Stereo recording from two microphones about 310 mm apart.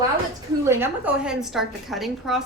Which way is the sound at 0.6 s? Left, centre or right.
Centre.